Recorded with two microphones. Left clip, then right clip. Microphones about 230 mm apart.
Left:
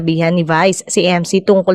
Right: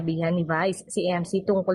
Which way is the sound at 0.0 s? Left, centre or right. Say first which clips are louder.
Left 12 dB; left.